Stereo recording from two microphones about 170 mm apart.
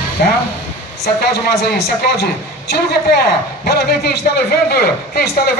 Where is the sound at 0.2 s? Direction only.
60° left (ahead or behind).